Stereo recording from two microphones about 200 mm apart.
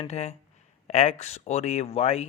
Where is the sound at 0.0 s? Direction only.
35° left (ahead or behind).